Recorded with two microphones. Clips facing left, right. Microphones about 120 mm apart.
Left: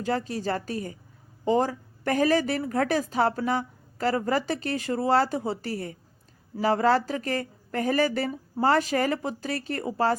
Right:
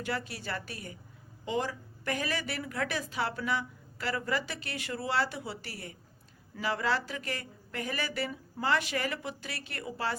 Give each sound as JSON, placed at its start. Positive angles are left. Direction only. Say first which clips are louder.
{"t": 0.0, "sound": "a woman's voice", "louder": "left 8 dB", "side_deg": 40}